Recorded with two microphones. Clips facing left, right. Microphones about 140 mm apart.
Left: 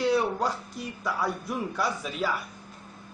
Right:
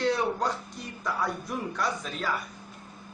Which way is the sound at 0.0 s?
5° left (ahead or behind).